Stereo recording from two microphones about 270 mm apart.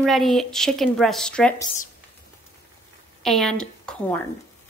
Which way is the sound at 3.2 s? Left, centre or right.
Centre.